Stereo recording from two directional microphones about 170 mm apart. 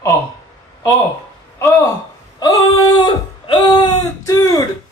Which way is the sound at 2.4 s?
25° left (ahead or behind).